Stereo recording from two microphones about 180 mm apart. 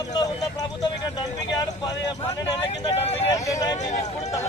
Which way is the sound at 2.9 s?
35° left (ahead or behind).